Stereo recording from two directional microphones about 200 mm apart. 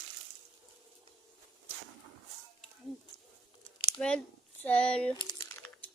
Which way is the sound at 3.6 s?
5° left (ahead or behind).